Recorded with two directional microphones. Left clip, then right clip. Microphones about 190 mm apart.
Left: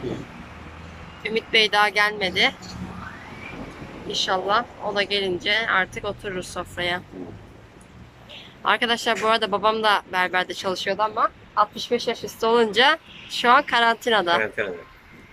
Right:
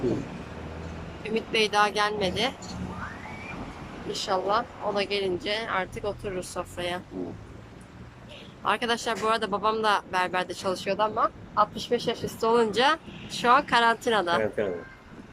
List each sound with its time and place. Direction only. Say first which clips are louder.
1.2 s speech: left 6 dB; centre (ahead or behind)
4.1 s speech: left 4 dB; 5° right (ahead or behind)
8.6 s speech: left 5 dB; centre (ahead or behind)
14.4 s speech: left 2 dB; 15° right (ahead or behind)